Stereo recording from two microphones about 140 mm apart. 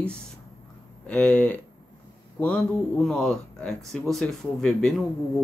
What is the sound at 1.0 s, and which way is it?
Speech, 5° left (ahead or behind).